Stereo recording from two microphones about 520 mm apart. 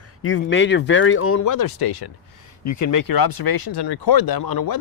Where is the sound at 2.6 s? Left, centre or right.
Left.